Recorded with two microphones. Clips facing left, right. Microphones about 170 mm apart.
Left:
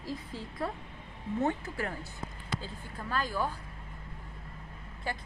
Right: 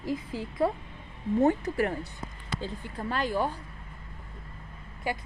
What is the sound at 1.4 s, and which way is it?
Speech, 40° right (ahead or behind).